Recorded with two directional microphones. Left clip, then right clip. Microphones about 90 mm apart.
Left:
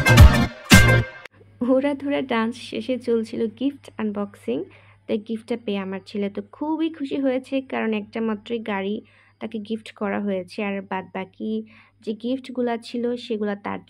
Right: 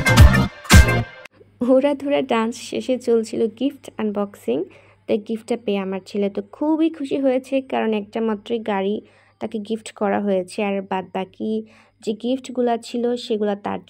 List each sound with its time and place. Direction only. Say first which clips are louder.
1.6 s speech: right 4 dB; 30° right (ahead or behind)